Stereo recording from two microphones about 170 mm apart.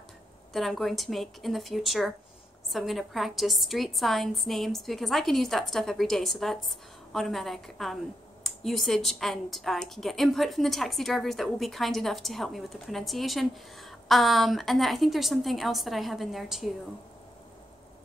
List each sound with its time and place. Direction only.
0.5 s a woman's voice: centre (ahead or behind)